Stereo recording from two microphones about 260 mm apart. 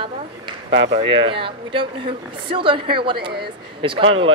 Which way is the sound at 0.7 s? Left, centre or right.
Centre.